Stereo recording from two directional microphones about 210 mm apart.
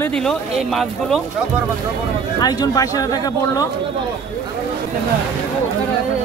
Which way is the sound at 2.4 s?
20° left (ahead or behind).